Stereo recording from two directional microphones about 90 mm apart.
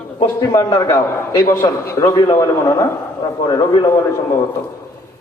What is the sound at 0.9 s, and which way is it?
A man's voice, 35° left (ahead or behind).